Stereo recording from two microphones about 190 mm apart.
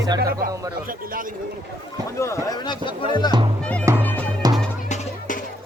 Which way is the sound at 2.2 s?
15° left (ahead or behind).